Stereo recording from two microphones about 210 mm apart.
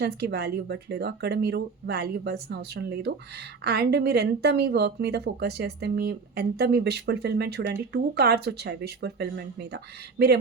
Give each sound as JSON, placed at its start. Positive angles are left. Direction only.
{"t": 0.0, "sound": "speech", "side_deg": -50}